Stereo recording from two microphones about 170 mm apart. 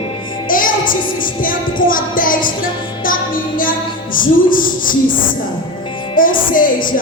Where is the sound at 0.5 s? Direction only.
55° left (ahead or behind).